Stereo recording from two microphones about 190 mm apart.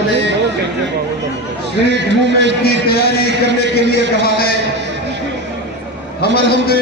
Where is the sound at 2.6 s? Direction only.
55° left (ahead or behind).